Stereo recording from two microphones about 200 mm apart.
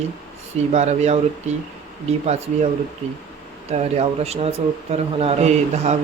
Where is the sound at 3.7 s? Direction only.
30° right (ahead or behind).